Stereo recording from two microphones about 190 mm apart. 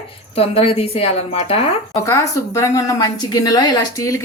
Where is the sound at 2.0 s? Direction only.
15° left (ahead or behind).